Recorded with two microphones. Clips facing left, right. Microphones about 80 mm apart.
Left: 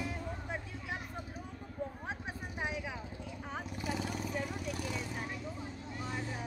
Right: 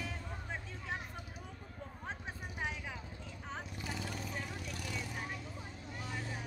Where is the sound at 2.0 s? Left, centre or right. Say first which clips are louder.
Left 3 dB; centre.